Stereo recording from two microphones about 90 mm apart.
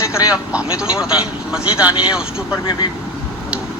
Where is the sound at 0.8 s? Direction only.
10° right (ahead or behind).